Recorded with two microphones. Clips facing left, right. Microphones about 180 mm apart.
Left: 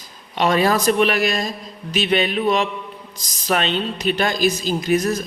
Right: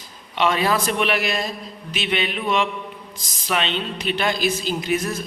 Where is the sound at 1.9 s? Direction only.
40° left (ahead or behind).